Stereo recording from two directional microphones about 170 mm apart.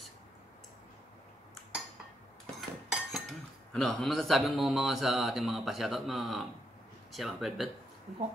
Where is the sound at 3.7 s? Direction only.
Centre (ahead or behind).